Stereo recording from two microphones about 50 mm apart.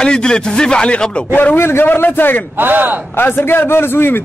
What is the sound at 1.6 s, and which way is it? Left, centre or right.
Speech, left.